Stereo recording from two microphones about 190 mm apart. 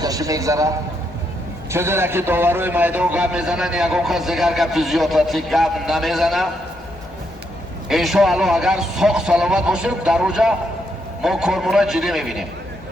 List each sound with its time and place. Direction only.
0.0 s a man's voice: 20° right (ahead or behind)
1.7 s a man's voice: 15° right (ahead or behind)
7.9 s a man's voice: centre (ahead or behind)